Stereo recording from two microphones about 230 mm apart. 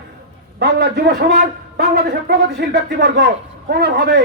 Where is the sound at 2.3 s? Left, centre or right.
Right.